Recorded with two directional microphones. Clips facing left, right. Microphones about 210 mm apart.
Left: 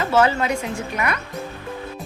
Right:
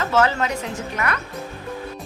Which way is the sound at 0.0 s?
10° left (ahead or behind).